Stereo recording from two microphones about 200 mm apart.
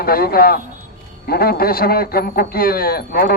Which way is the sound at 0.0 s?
50° left (ahead or behind).